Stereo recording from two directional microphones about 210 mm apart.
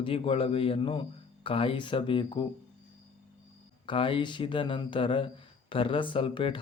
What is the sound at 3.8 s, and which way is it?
Speech, 25° left (ahead or behind).